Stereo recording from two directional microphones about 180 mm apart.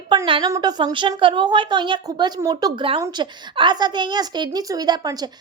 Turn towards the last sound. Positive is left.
turn(degrees=-20)  # may be behind; listen again after turning